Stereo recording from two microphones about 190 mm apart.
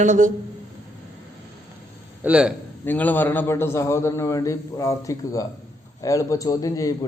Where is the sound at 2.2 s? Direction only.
5° right (ahead or behind).